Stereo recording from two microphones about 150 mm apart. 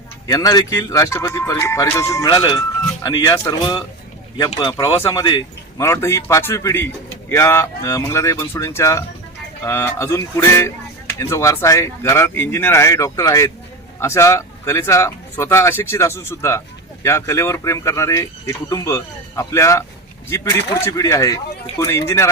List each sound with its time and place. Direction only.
0.3 s speech: 25° left (ahead or behind)